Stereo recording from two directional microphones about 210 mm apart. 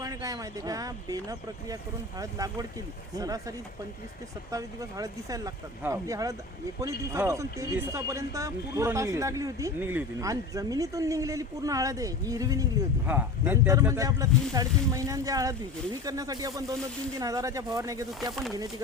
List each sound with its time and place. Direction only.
0.0 s speech: 15° right (ahead or behind)
4.5 s speech: 15° right (ahead or behind)